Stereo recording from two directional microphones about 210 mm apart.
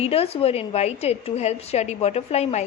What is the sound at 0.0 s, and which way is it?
A woman's voice, 30° left (ahead or behind).